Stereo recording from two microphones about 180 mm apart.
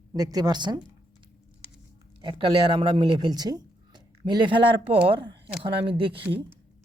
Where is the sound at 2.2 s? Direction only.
30° right (ahead or behind).